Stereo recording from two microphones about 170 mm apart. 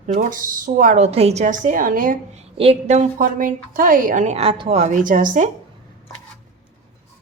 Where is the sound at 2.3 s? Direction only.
35° right (ahead or behind).